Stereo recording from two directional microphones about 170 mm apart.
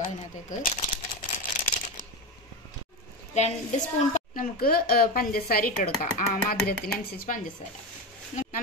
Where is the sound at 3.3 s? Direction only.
40° left (ahead or behind).